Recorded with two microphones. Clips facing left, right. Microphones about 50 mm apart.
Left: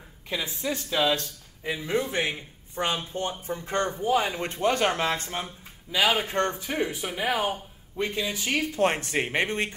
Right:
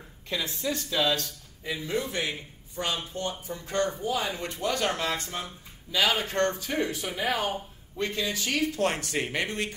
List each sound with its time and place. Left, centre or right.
0.3 s speech: centre; by 9.8 s left